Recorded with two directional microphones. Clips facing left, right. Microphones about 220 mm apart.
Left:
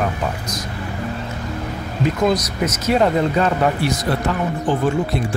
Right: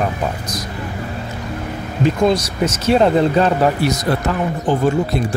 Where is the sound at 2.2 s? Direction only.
30° right (ahead or behind).